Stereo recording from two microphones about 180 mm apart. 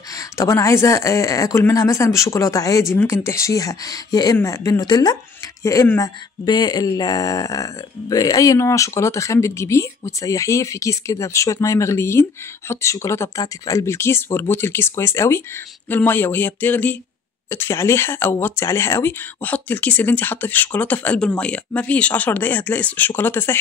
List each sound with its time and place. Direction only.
0.1 s speech: 20° left (ahead or behind)